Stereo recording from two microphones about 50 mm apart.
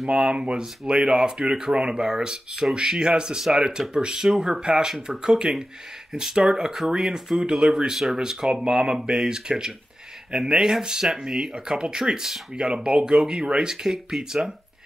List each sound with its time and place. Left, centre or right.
0.0 s speech: right